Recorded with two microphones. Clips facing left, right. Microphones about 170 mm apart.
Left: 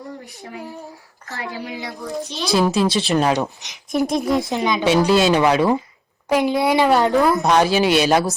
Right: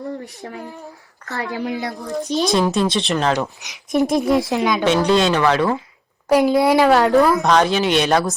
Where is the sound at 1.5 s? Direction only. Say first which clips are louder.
Right 8 dB; 50° right (ahead or behind).